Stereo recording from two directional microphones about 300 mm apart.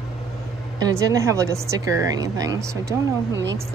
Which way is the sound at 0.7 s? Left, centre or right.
Centre.